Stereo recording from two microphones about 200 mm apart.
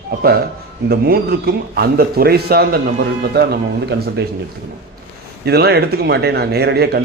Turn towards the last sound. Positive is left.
turn(degrees=-55)  # may be behind; listen again after turning